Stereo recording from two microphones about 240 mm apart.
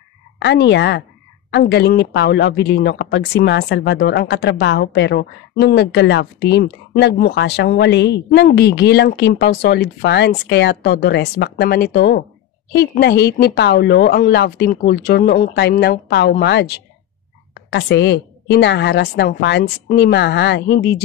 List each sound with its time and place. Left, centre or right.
0.4 s a woman's voice: left